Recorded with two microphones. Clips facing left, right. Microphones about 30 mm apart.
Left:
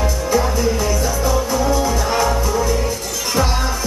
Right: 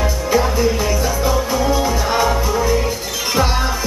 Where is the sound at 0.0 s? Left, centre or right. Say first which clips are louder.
Right 1 dB; centre.